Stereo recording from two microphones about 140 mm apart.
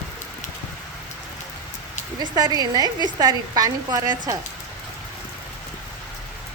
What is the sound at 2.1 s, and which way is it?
A woman's voice, 30° right (ahead or behind).